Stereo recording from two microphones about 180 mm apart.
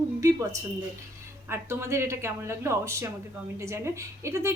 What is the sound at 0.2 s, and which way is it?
A woman's voice, 15° right (ahead or behind).